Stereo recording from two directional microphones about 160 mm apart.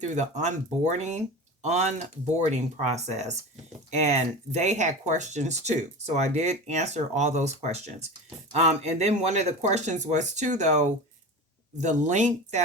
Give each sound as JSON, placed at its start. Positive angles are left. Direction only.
{"t": 0.0, "sound": "speech", "side_deg": -50}